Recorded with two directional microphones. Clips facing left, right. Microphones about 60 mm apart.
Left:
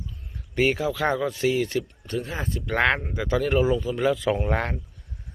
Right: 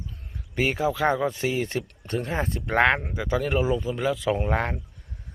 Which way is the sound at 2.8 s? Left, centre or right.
Centre.